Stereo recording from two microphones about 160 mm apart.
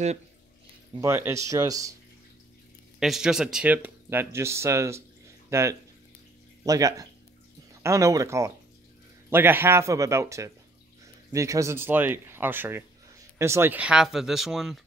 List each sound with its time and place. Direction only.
1.0 s speech: 15° right (ahead or behind)
3.0 s speech: 5° right (ahead or behind)